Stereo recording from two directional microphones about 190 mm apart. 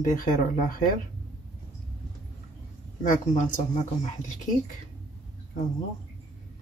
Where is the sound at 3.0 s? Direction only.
40° left (ahead or behind).